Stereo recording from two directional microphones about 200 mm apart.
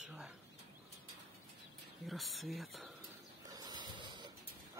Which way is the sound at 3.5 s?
20° right (ahead or behind).